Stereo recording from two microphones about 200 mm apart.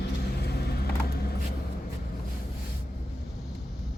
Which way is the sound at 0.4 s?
55° left (ahead or behind).